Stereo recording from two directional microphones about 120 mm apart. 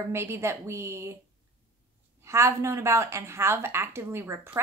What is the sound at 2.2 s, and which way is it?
A woman's voice, 25° right (ahead or behind).